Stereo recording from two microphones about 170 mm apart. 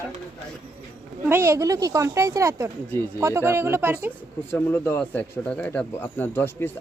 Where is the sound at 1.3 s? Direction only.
15° right (ahead or behind).